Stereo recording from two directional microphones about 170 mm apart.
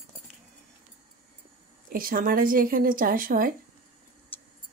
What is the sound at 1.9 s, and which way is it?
A woman's voice, 55° right (ahead or behind).